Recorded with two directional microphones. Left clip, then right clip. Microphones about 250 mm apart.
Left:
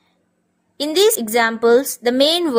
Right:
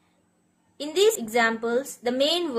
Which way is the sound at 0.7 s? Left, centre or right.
Left.